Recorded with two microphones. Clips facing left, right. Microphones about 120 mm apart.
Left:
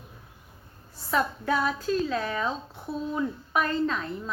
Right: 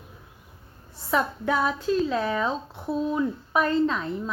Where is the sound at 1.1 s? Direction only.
15° right (ahead or behind).